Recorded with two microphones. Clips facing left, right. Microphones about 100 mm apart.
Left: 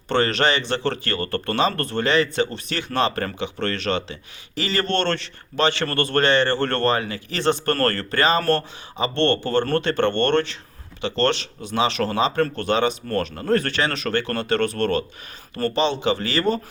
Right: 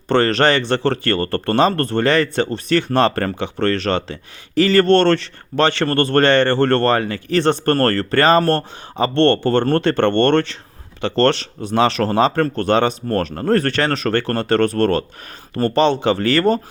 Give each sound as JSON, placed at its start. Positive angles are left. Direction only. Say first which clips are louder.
{"t": 0.1, "sound": "speech", "louder": "right 5 dB", "side_deg": -45}